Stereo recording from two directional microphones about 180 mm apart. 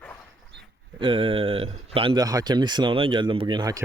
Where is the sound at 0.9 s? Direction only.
25° right (ahead or behind).